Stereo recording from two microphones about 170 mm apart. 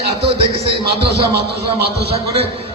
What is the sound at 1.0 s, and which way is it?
Speech, 70° right (ahead or behind).